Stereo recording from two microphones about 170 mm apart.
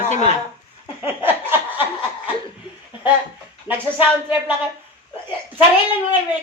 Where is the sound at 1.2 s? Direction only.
10° right (ahead or behind).